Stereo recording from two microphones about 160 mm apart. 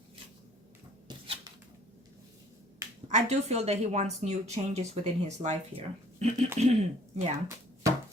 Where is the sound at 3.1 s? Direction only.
45° right (ahead or behind).